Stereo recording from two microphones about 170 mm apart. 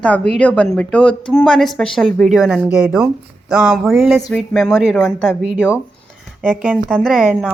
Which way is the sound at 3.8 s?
Centre (ahead or behind).